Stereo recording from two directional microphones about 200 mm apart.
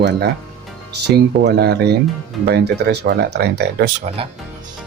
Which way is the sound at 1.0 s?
55° right (ahead or behind).